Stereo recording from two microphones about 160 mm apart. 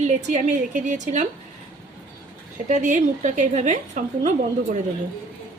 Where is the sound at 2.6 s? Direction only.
50° right (ahead or behind).